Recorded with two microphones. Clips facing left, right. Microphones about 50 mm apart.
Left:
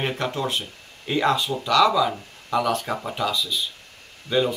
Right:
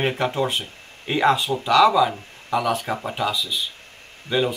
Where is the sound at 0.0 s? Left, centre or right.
Right.